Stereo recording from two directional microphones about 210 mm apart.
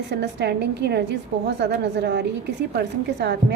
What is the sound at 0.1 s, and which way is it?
A woman's voice, 55° right (ahead or behind).